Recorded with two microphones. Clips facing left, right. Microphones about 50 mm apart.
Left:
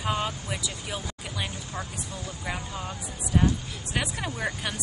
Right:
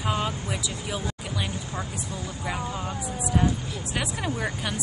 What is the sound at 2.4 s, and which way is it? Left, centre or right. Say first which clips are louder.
Speech: right 4 dB; centre.